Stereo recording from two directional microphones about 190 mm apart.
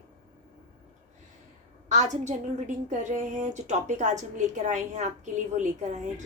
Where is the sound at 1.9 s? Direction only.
40° right (ahead or behind).